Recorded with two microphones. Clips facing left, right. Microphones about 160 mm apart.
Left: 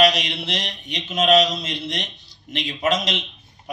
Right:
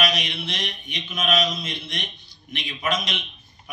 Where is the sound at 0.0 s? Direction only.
35° left (ahead or behind).